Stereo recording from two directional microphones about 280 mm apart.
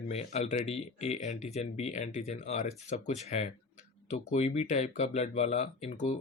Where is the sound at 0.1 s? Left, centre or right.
Left.